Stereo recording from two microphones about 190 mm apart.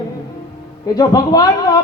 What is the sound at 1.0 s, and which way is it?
Speech, 20° left (ahead or behind).